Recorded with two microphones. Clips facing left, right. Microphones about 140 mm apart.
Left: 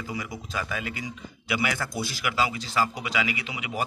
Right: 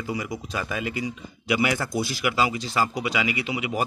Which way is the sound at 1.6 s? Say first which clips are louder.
Right 4 dB; 15° right (ahead or behind).